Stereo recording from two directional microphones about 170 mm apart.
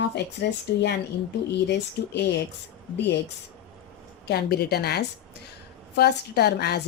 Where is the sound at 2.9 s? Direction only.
90° left.